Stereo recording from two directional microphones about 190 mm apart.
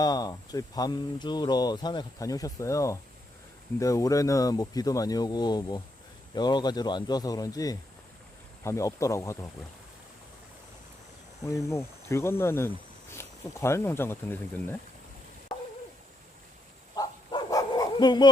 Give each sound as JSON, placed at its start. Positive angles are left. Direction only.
{"t": 0.0, "sound": "speech", "side_deg": 20}
{"t": 11.4, "sound": "speech", "side_deg": 15}
{"t": 16.9, "sound": "dog", "side_deg": 20}